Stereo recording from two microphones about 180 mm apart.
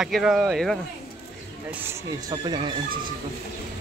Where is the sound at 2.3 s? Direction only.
25° right (ahead or behind).